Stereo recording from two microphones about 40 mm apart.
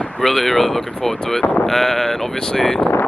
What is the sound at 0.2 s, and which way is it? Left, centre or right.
Speech, centre.